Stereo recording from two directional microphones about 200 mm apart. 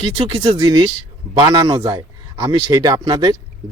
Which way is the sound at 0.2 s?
25° right (ahead or behind).